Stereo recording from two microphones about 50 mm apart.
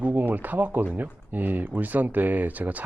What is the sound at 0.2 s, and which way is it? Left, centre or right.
Speech, right.